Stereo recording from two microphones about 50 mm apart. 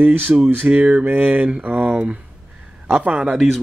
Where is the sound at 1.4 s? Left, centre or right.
Right.